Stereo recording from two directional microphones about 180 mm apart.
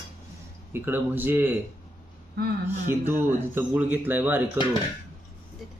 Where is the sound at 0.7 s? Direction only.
10° right (ahead or behind).